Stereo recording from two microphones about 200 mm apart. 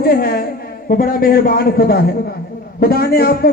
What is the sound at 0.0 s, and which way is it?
A woman's voice, 50° left (ahead or behind).